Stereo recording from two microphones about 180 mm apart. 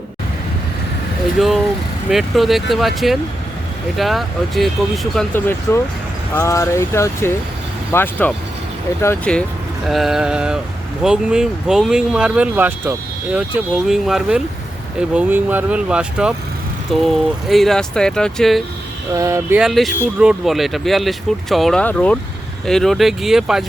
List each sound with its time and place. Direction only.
1.4 s speech: centre (ahead or behind)
5.1 s speech: 10° left (ahead or behind)
9.8 s speech: centre (ahead or behind)
19.1 s speech: 15° right (ahead or behind)
19.5 s speech: centre (ahead or behind)